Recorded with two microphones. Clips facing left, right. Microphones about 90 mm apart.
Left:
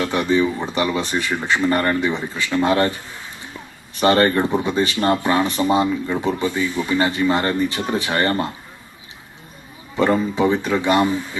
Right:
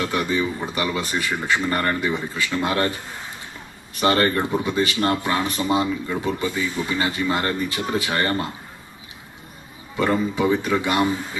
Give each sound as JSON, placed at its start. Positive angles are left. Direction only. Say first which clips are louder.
{"t": 0.1, "sound": "speech", "louder": "left 5 dB", "side_deg": 25}
{"t": 4.0, "sound": "speech", "louder": "left 4 dB", "side_deg": 25}
{"t": 10.3, "sound": "speech", "louder": "left 2 dB", "side_deg": 25}